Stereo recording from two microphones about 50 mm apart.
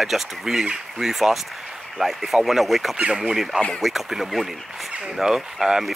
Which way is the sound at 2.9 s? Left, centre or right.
Centre.